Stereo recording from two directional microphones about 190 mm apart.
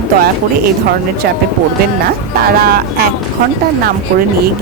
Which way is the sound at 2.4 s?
50° right (ahead or behind).